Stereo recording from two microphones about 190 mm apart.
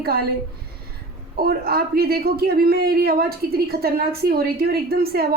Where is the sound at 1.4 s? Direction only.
55° right (ahead or behind).